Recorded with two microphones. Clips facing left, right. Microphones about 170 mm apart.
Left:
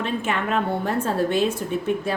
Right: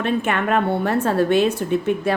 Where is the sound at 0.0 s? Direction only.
60° right (ahead or behind).